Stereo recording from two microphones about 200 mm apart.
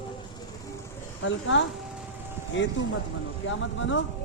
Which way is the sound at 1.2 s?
65° left (ahead or behind).